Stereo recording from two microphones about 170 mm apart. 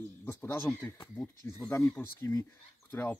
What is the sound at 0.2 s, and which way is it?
Speech, 10° left (ahead or behind).